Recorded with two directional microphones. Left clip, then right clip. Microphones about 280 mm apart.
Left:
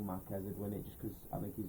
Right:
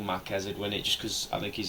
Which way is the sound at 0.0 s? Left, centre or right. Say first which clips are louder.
Right 12 dB; right.